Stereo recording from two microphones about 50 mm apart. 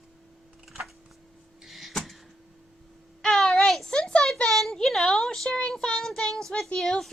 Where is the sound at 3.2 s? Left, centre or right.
Centre.